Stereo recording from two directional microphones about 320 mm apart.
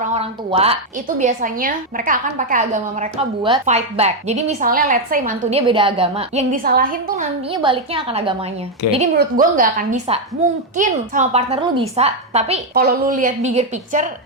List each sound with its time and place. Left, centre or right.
0.0 s a woman's voice: centre
7.6 s a woman's voice: centre
8.8 s a woman's voice: left
9.1 s a woman's voice: right